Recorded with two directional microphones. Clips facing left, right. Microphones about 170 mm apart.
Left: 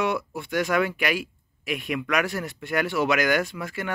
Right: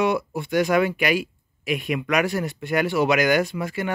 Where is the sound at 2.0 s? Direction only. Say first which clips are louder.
Right 4 dB; 15° right (ahead or behind).